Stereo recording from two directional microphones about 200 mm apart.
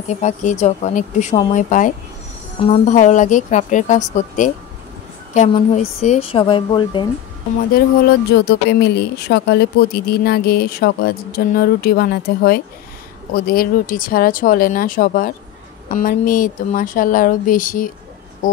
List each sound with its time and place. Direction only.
0.1 s a woman's voice: 35° left (ahead or behind)
7.7 s speech: 50° left (ahead or behind)